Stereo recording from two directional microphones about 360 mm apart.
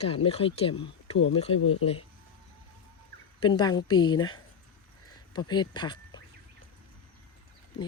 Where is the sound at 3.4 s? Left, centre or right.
Centre.